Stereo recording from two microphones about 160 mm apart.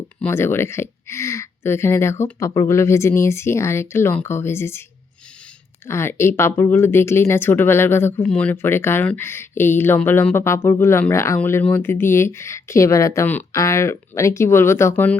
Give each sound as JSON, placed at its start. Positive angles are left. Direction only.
{"t": 0.2, "sound": "speech", "side_deg": 15}
{"t": 5.8, "sound": "speech", "side_deg": 15}